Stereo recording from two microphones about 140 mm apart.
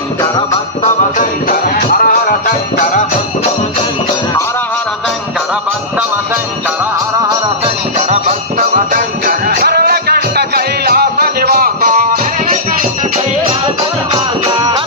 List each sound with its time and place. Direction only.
1.5 s music: 80° left
7.2 s music: 30° right (ahead or behind)
7.9 s music: 55° right (ahead or behind)
8.7 s music: 75° right (ahead or behind)